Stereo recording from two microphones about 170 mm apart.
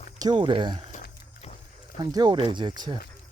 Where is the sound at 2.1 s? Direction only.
25° right (ahead or behind).